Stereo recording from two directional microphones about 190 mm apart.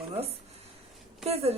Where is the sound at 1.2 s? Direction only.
35° right (ahead or behind).